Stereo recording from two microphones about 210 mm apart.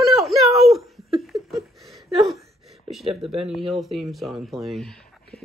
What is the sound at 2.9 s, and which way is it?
Speech, 30° right (ahead or behind).